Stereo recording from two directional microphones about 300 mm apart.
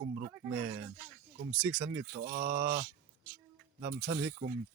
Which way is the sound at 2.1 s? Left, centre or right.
Right.